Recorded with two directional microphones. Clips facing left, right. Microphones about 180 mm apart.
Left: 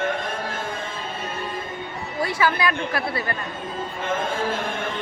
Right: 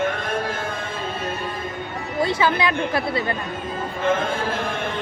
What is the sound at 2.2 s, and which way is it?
A woman's voice, 20° right (ahead or behind).